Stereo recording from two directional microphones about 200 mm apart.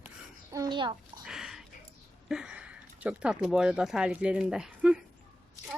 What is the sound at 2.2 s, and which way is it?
Speech, 5° right (ahead or behind).